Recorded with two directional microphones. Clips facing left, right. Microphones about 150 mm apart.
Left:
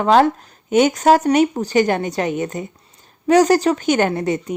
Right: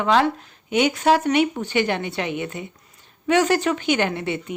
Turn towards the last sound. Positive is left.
turn(degrees=40)  # may be behind; listen again after turning